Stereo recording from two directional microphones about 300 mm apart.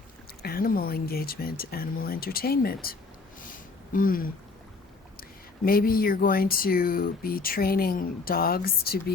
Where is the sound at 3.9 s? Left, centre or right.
Left.